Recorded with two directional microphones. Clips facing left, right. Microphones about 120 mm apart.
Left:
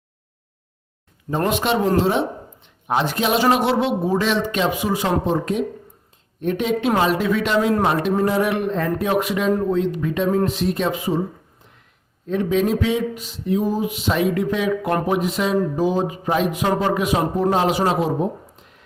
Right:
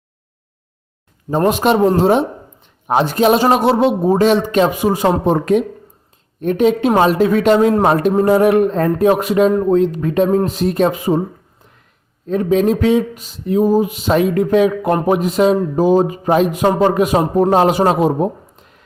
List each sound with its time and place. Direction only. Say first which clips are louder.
1.5 s a man's voice: right 6 dB; 40° right (ahead or behind)
5.2 s speech: right 7 dB; 60° right (ahead or behind)
6.4 s a man's voice: right 7 dB; 45° right (ahead or behind)
12.3 s speech: right 5 dB; 40° right (ahead or behind)